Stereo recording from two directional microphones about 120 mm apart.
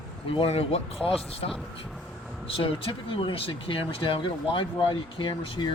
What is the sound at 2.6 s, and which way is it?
Speech, 50° left (ahead or behind).